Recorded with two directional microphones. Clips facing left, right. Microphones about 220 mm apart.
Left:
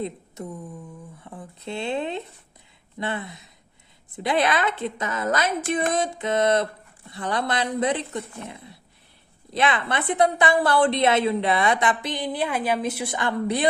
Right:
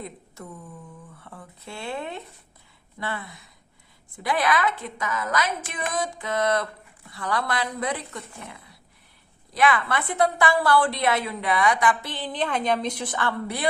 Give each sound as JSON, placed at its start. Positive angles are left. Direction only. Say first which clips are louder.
{"t": 0.0, "sound": "a woman's voice", "louder": "left 7 dB", "side_deg": 25}